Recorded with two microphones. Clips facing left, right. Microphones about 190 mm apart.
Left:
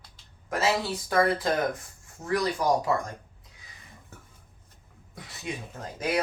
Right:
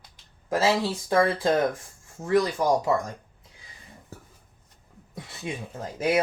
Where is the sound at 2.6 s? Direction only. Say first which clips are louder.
Right 2 dB; 25° right (ahead or behind).